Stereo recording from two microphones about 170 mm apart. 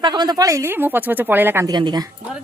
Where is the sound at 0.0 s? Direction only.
25° right (ahead or behind).